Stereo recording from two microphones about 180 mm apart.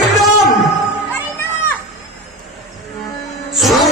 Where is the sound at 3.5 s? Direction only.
Centre (ahead or behind).